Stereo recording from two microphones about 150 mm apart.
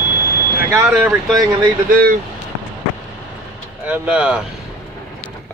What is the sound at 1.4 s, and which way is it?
Speech, 20° right (ahead or behind).